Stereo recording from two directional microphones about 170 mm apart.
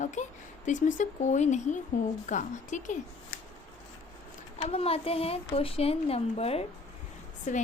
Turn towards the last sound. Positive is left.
turn(degrees=45)  # may be behind; listen again after turning